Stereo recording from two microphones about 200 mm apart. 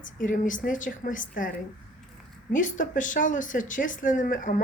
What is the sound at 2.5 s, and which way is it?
Speech, 40° left (ahead or behind).